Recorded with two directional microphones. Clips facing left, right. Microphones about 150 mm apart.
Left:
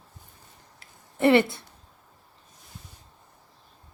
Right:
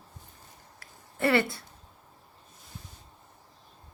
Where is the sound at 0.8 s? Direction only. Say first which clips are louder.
Left 6 dB; 20° left (ahead or behind).